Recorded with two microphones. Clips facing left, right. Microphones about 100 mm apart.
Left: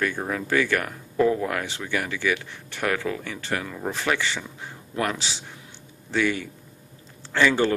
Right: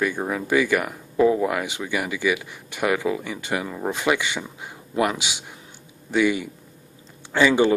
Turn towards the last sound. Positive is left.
turn(degrees=-15)  # may be behind; listen again after turning